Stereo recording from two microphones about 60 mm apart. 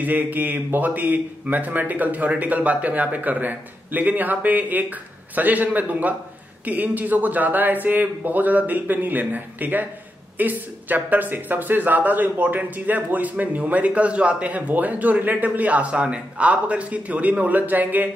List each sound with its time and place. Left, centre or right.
0.0 s speech: right